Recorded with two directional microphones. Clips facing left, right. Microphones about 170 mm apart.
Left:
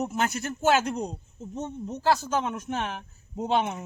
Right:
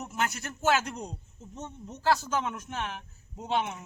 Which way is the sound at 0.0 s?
25° left (ahead or behind).